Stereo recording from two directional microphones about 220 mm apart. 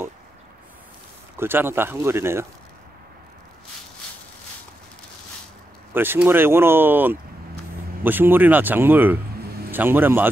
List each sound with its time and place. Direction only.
1.4 s speech: 10° right (ahead or behind)
5.9 s speech: 10° right (ahead or behind)